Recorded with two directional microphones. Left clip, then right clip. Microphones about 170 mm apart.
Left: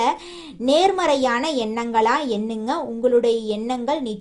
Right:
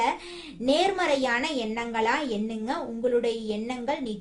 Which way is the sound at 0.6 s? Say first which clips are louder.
Left 6 dB; 35° left (ahead or behind).